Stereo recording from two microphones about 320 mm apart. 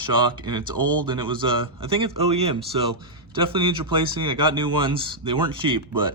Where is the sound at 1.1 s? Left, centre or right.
Centre.